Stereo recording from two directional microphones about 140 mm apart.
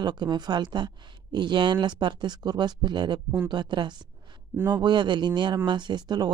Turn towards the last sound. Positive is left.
turn(degrees=-30)  # may be behind; listen again after turning